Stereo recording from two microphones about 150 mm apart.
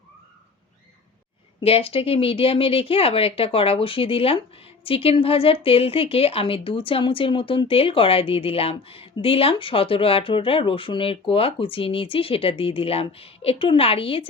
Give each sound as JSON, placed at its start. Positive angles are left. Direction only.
{"t": 1.6, "sound": "a woman's voice", "side_deg": 40}